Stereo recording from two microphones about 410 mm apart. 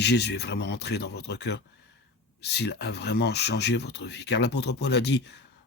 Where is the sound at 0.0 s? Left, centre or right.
Left.